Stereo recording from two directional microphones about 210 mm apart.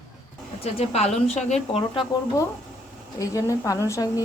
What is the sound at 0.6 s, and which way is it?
A woman's voice, 30° left (ahead or behind).